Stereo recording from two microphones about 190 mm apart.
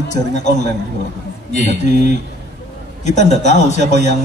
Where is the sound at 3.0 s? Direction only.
40° left (ahead or behind).